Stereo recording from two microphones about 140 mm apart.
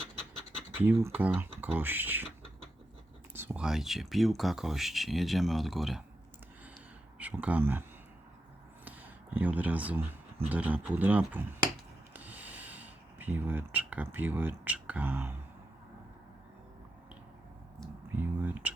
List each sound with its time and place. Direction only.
0.8 s speech: 15° right (ahead or behind)
3.3 s speech: 15° right (ahead or behind)
7.2 s speech: 10° right (ahead or behind)
8.8 s a sound: 10° right (ahead or behind)
10.5 s speech: 10° right (ahead or behind)
12.1 s a sound: 10° right (ahead or behind)
18.2 s speech: 10° right (ahead or behind)